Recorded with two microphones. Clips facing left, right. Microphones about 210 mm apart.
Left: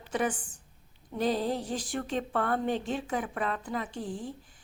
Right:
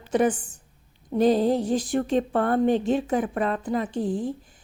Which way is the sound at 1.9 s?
45° right (ahead or behind).